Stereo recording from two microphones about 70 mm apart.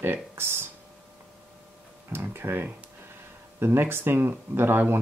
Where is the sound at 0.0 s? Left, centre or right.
Right.